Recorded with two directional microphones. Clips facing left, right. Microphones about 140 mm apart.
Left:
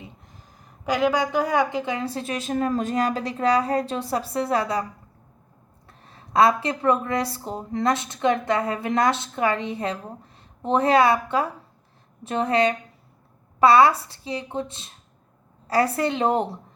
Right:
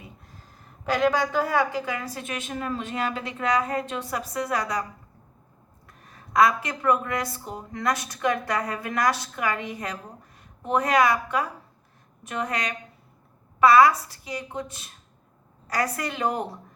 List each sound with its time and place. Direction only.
0.9 s a woman's voice: 10° left (ahead or behind); by 4.9 s 30° left (ahead or behind)
5.9 s speech: 30° left (ahead or behind)